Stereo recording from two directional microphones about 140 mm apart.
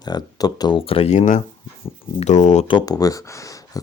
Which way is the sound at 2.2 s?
55° left (ahead or behind).